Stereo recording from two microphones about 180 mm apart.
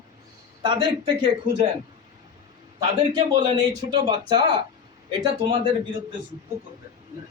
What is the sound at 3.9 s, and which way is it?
Speech, 25° right (ahead or behind).